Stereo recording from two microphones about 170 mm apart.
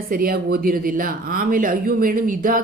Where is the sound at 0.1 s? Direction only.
60° right (ahead or behind).